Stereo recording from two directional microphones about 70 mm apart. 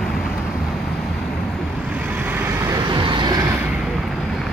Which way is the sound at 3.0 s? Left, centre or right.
Right.